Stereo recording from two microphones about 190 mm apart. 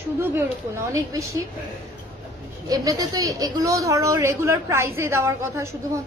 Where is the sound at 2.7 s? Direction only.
20° right (ahead or behind).